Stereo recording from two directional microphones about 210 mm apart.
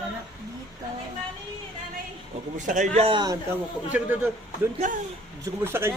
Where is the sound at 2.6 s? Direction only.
35° right (ahead or behind); by 3.4 s 20° right (ahead or behind).